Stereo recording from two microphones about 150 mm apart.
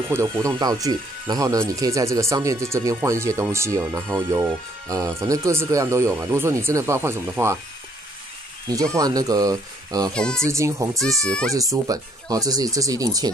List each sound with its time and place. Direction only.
0.1 s speech: 20° right (ahead or behind)
8.9 s speech: 25° right (ahead or behind)
10.1 s speech: 5° left (ahead or behind)
10.5 s speech: 20° right (ahead or behind)
11.0 s speech: 5° left (ahead or behind)
11.5 s speech: 25° right (ahead or behind)